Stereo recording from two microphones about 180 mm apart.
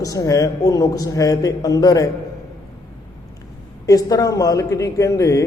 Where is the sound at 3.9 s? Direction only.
20° left (ahead or behind).